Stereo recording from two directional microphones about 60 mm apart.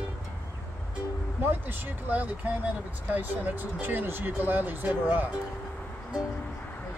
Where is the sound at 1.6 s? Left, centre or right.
Right.